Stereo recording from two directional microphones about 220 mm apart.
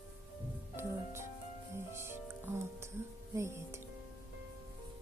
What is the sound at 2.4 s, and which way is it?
Speech, 10° right (ahead or behind).